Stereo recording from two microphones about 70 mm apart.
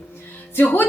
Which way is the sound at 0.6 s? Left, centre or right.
Left.